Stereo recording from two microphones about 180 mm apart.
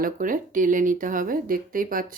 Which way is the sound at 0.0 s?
50° right (ahead or behind).